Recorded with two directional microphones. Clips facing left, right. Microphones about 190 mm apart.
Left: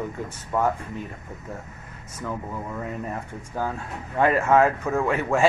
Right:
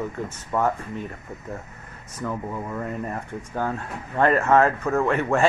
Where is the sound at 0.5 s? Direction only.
Centre (ahead or behind).